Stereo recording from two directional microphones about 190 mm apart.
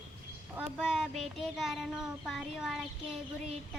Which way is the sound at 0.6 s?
5° right (ahead or behind).